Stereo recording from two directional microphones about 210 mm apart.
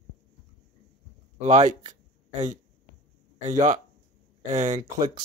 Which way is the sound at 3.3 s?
35° right (ahead or behind).